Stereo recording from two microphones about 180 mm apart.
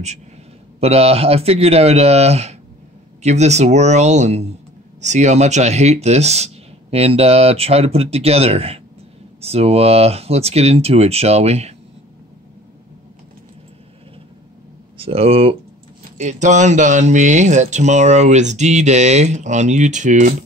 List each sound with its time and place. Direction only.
0.7 s speech: 35° right (ahead or behind)
15.0 s speech: 35° right (ahead or behind)